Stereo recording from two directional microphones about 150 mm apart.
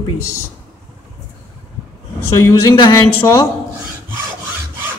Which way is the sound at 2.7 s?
30° left (ahead or behind).